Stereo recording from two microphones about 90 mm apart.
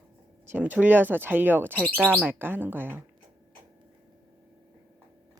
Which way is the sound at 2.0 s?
20° right (ahead or behind).